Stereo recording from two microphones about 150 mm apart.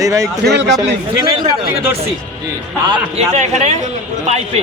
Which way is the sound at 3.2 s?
50° right (ahead or behind).